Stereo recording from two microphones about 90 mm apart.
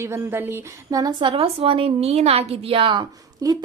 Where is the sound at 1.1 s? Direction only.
75° right (ahead or behind).